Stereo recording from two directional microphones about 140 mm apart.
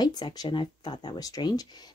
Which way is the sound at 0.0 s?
30° left (ahead or behind).